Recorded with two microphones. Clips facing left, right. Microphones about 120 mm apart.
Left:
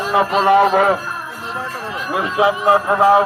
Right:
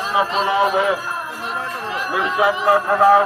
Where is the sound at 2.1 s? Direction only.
25° left (ahead or behind).